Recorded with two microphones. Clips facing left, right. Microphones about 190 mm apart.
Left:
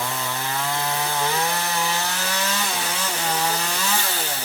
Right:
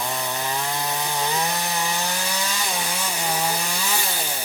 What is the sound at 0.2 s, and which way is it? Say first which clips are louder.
Wood: right 1 dB; 15° right (ahead or behind).